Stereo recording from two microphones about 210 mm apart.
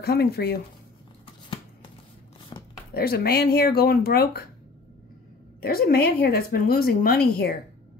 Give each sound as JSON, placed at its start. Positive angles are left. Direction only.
{"t": 0.0, "sound": "speech", "side_deg": 50}
{"t": 1.2, "sound": "shuffling cards", "side_deg": 25}
{"t": 2.5, "sound": "a sound", "side_deg": 25}
{"t": 2.9, "sound": "speech", "side_deg": 45}
{"t": 5.6, "sound": "speech", "side_deg": 45}